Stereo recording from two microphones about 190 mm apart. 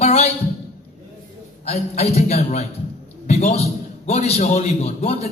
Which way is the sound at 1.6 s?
35° left (ahead or behind).